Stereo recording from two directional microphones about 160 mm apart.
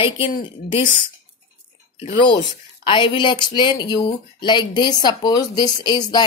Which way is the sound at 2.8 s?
30° left (ahead or behind).